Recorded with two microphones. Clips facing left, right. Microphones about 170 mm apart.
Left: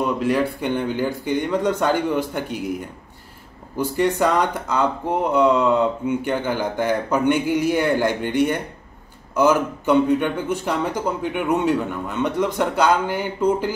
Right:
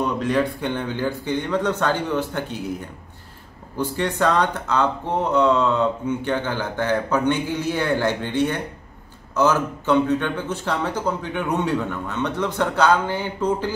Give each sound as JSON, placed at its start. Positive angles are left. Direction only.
{"t": 0.0, "sound": "speech", "side_deg": 10}
{"t": 3.7, "sound": "speech", "side_deg": 10}